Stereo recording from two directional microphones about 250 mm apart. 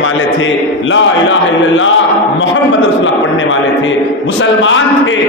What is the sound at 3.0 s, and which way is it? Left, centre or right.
A man's voice, left.